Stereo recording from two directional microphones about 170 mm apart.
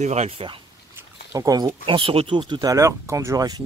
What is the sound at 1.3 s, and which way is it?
Speech, 20° right (ahead or behind).